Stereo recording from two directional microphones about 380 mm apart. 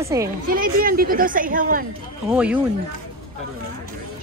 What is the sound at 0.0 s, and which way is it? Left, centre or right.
Speech, centre.